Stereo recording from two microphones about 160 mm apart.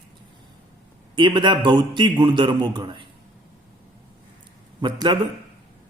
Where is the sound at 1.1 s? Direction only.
30° right (ahead or behind).